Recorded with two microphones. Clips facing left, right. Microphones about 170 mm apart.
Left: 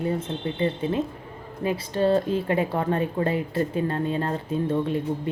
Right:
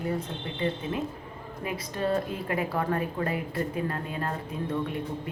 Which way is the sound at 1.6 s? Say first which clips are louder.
Left 7 dB; 30° left (ahead or behind).